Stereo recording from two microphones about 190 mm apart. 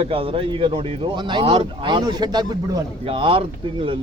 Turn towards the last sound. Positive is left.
turn(degrees=-25)  # may be behind; listen again after turning